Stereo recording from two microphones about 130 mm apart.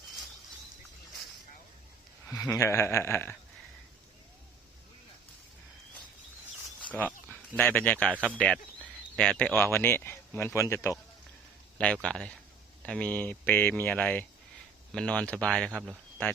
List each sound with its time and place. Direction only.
2.5 s speech: 20° left (ahead or behind)
6.9 s speech: 10° left (ahead or behind)
9.1 s speech: 5° left (ahead or behind)
11.8 s speech: 10° left (ahead or behind)